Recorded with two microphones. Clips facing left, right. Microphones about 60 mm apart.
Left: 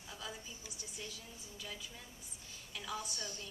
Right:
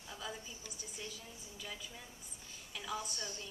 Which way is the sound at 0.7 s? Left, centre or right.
Centre.